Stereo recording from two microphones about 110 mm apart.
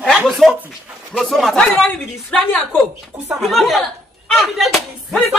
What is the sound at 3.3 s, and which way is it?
Speech, centre (ahead or behind).